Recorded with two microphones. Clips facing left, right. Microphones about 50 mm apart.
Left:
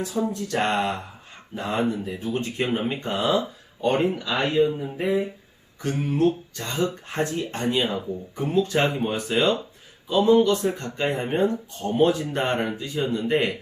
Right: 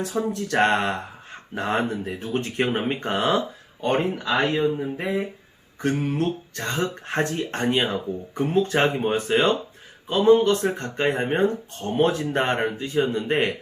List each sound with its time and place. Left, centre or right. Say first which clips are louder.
0.0 s speech: right 1 dB; right
3.8 s speech: left 1 dB; right
8.6 s speech: right 2 dB; right